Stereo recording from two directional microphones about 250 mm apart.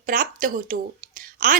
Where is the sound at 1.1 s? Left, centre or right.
Right.